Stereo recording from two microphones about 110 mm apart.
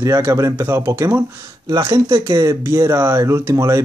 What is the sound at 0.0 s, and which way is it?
Speech, 25° right (ahead or behind).